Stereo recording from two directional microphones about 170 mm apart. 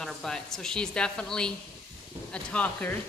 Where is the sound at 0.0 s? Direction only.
5° left (ahead or behind).